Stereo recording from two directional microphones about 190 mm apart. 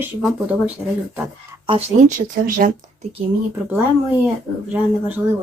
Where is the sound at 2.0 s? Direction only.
45° right (ahead or behind).